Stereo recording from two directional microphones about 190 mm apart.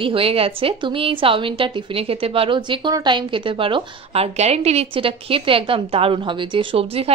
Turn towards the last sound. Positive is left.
turn(degrees=-30)  # may be behind; listen again after turning